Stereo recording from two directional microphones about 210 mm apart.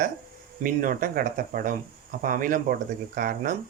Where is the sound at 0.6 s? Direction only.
40° right (ahead or behind).